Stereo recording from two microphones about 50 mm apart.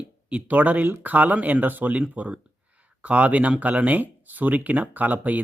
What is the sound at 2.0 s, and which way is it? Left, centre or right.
Speech, right.